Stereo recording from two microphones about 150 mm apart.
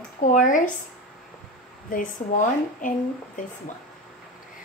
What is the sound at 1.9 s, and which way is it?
Speech, 65° left (ahead or behind).